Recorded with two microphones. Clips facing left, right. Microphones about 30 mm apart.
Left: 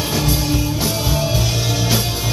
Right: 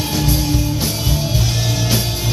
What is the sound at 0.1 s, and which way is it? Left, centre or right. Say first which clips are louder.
Music: right 1 dB; centre.